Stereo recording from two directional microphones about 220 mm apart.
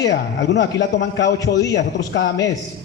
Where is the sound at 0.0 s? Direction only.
50° left (ahead or behind).